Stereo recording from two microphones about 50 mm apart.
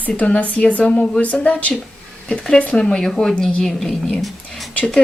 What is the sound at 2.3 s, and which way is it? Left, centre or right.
Speech, centre.